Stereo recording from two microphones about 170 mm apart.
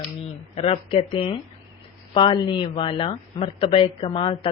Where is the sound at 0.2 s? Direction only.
35° left (ahead or behind).